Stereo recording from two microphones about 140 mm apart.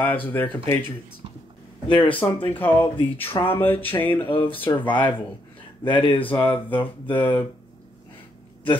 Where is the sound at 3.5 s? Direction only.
15° left (ahead or behind).